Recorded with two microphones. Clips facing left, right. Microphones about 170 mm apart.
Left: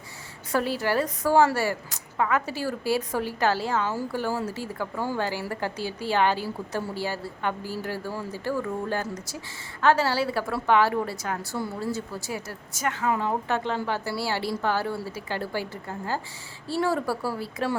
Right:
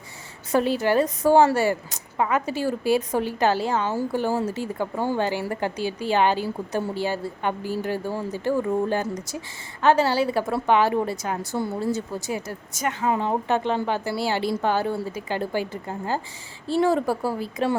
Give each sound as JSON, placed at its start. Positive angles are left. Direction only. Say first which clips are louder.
{"t": 0.5, "sound": "a woman's voice", "louder": "right 5 dB", "side_deg": -20}